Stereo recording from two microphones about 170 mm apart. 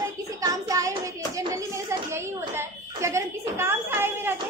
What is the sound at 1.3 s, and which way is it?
Speech, 15° right (ahead or behind).